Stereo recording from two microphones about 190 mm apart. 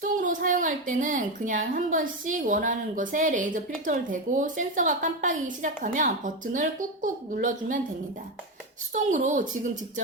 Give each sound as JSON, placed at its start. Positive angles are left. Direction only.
{"t": 0.0, "sound": "a woman's voice", "side_deg": -45}
{"t": 8.9, "sound": "speech", "side_deg": -40}